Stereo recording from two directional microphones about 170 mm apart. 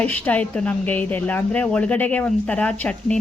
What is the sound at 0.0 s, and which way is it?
Speech, 10° left (ahead or behind).